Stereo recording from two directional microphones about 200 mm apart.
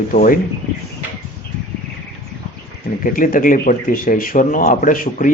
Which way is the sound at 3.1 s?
45° left (ahead or behind).